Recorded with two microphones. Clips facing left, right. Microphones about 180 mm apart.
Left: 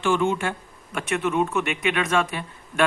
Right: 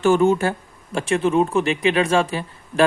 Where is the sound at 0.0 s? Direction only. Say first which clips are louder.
Right 6 dB; 40° right (ahead or behind).